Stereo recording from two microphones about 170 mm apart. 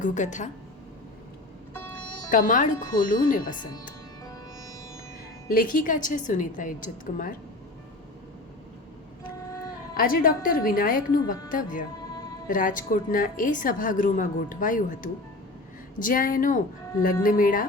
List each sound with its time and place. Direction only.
0.0 s a woman's voice: 45° left (ahead or behind)
2.3 s a woman's voice: 50° left (ahead or behind)
3.5 s speech: 25° left (ahead or behind)
5.5 s a woman's voice: 55° left (ahead or behind)
9.9 s a woman's voice: 60° left (ahead or behind)